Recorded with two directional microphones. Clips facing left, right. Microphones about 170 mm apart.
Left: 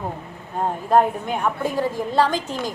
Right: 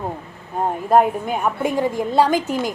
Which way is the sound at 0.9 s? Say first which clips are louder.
Right 2 dB; 10° right (ahead or behind).